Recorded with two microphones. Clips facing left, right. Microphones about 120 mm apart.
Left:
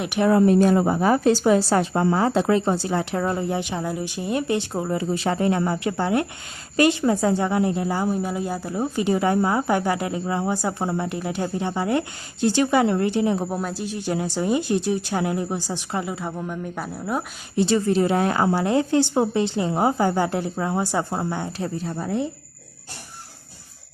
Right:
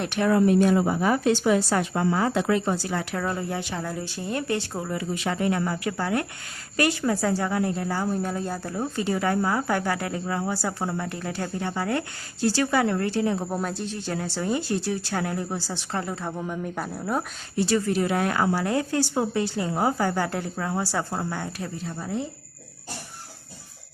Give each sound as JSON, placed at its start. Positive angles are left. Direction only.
{"t": 0.2, "sound": "a woman's voice", "side_deg": 30}
{"t": 13.5, "sound": "speech", "side_deg": 0}
{"t": 13.8, "sound": "speech", "side_deg": 15}
{"t": 17.6, "sound": "a woman's voice", "side_deg": 25}
{"t": 21.9, "sound": "speech", "side_deg": 60}